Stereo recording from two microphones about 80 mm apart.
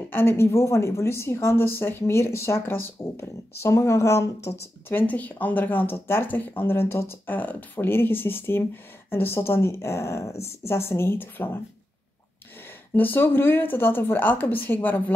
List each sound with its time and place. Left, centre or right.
0.1 s a woman's voice: left
12.9 s speech: left